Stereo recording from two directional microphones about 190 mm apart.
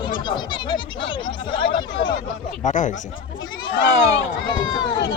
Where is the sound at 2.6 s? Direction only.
40° left (ahead or behind).